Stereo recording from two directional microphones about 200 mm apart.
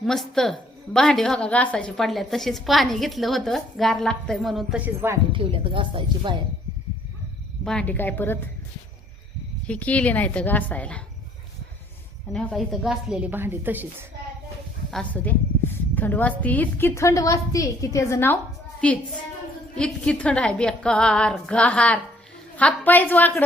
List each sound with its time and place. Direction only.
0.0 s a woman's voice: centre (ahead or behind)
5.3 s speech: 25° right (ahead or behind)
7.6 s a woman's voice: 5° left (ahead or behind)
9.6 s a woman's voice: 5° left (ahead or behind)
12.3 s a woman's voice: 5° left (ahead or behind)
14.8 s a sound: 5° left (ahead or behind)
16.4 s a woman's voice: 10° left (ahead or behind)
19.7 s a woman's voice: 5° left (ahead or behind)